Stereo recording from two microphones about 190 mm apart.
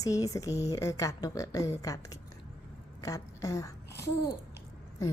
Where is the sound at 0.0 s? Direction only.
15° left (ahead or behind).